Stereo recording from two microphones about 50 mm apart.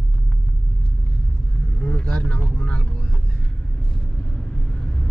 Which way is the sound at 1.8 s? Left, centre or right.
Left.